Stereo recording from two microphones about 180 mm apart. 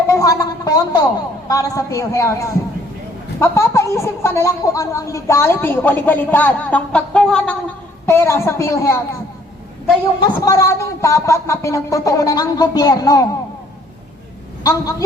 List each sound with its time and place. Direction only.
0.1 s a woman's voice: 20° left (ahead or behind)
10.2 s speech: 20° left (ahead or behind)
14.6 s a woman's voice: 20° left (ahead or behind)